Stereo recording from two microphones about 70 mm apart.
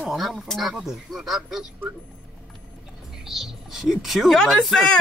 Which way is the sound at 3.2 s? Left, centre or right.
Centre.